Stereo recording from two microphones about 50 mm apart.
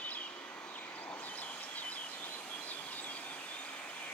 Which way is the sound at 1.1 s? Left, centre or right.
Left.